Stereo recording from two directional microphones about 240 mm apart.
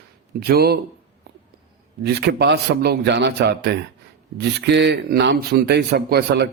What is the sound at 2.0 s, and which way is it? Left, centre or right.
A man's voice, right.